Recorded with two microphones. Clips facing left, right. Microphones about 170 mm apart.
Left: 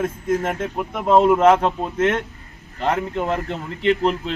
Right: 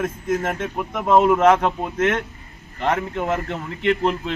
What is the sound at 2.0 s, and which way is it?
Speech, 30° left (ahead or behind).